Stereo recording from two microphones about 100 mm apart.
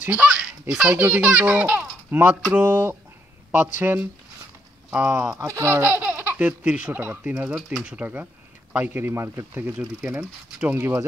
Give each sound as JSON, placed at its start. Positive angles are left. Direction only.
{"t": 0.0, "sound": "speech", "side_deg": -15}